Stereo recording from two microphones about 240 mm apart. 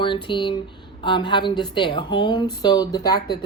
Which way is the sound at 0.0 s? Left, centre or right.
Centre.